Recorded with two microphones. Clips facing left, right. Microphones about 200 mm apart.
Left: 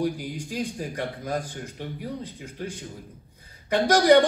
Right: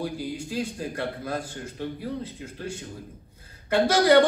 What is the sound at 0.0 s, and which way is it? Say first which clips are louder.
A man's voice: left 3 dB; 15° left (ahead or behind).